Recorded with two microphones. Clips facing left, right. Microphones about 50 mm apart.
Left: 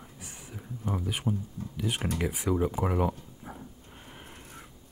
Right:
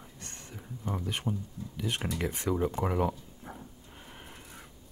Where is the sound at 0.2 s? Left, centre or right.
Centre.